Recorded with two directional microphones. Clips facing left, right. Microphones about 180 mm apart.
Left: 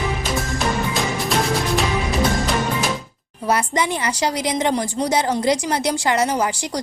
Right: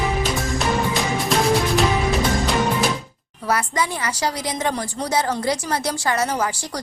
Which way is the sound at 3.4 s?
20° left (ahead or behind).